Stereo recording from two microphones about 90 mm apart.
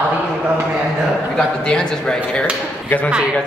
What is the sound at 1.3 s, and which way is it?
Speech, 10° left (ahead or behind).